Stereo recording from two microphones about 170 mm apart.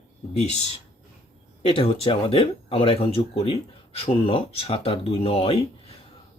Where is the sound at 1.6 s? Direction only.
35° left (ahead or behind).